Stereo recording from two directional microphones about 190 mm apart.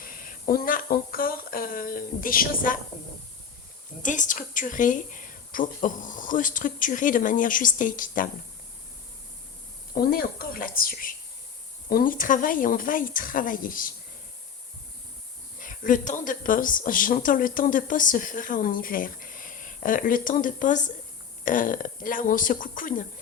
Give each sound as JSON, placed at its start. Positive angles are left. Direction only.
{"t": 0.0, "sound": "a sound", "side_deg": 45}
{"t": 4.0, "sound": "a woman's voice", "side_deg": 40}
{"t": 9.9, "sound": "a woman's voice", "side_deg": 50}
{"t": 15.5, "sound": "a woman's voice", "side_deg": 45}